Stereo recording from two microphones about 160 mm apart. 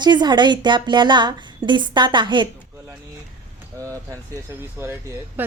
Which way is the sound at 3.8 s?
20° right (ahead or behind).